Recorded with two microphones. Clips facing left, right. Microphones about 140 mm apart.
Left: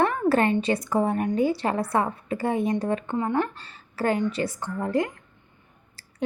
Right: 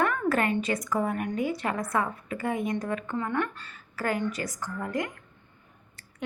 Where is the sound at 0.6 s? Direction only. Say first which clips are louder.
Left 4 dB; 30° left (ahead or behind).